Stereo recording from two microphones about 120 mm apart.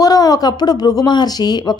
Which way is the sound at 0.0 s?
30° left (ahead or behind).